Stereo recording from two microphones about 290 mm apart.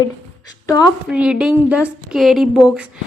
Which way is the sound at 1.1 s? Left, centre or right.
Centre.